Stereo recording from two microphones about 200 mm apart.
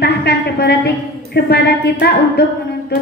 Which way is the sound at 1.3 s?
55° left (ahead or behind).